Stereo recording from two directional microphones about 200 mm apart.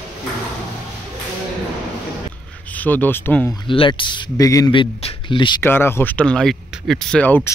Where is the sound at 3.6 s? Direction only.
25° left (ahead or behind).